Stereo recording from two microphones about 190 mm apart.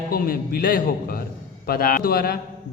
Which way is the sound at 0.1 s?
50° left (ahead or behind).